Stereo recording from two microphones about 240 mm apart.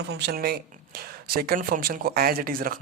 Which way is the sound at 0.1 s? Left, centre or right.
Right.